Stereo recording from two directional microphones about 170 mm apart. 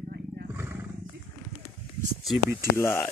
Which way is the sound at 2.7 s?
15° left (ahead or behind).